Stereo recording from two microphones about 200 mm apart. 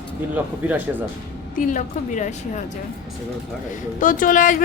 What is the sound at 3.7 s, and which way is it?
Speech, 40° left (ahead or behind).